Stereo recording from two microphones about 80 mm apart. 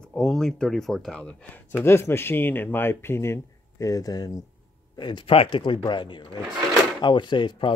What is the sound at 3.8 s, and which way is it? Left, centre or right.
Speech, left.